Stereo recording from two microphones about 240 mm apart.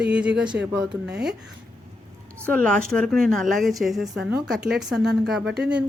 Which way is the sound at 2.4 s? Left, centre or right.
Centre.